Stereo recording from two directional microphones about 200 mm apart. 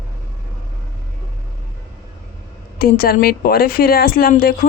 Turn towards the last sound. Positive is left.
turn(degrees=45)  # may be behind; listen again after turning